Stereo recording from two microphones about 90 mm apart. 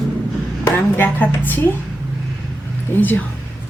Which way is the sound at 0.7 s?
20° left (ahead or behind).